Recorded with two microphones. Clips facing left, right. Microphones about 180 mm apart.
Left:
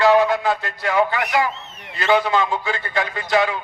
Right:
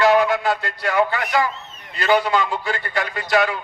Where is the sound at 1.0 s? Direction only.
20° left (ahead or behind).